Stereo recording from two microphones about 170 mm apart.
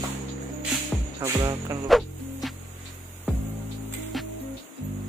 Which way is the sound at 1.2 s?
15° right (ahead or behind).